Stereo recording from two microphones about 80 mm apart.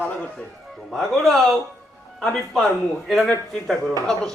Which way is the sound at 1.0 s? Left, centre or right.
Centre.